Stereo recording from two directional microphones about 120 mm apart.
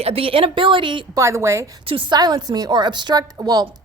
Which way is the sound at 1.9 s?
45° right (ahead or behind).